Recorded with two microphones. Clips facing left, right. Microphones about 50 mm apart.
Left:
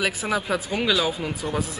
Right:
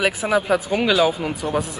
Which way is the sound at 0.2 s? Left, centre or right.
Centre.